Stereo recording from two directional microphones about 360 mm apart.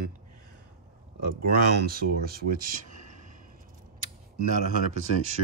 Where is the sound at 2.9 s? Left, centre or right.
Right.